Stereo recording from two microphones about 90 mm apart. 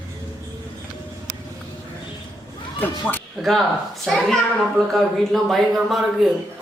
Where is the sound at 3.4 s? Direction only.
Centre (ahead or behind).